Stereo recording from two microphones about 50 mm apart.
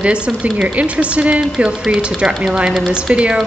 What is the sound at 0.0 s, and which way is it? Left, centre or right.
Speech, right.